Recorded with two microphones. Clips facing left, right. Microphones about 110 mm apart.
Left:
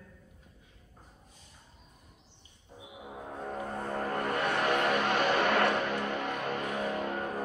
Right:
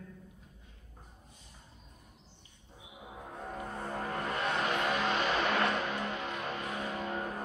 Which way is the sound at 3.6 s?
45° left (ahead or behind).